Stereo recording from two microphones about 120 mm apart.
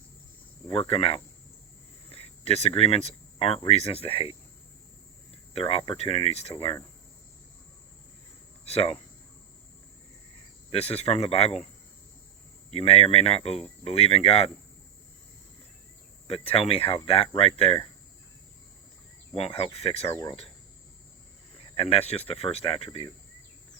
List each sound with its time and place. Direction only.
0.7 s speech: 55° left (ahead or behind)
5.5 s speech: 50° left (ahead or behind)
8.6 s speech: 60° left (ahead or behind)
10.7 s speech: 55° left (ahead or behind)
12.7 s speech: 55° left (ahead or behind)
16.2 s speech: 50° left (ahead or behind)
19.3 s speech: 55° left (ahead or behind)
21.8 s speech: 55° left (ahead or behind)